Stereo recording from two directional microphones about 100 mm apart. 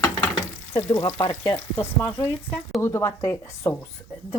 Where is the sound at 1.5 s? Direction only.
25° left (ahead or behind).